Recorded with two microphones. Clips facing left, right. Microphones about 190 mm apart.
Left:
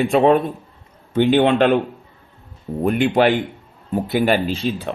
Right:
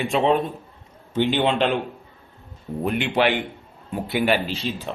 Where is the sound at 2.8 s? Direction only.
45° left (ahead or behind).